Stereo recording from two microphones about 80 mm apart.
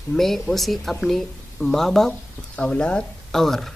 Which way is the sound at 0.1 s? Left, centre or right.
Centre.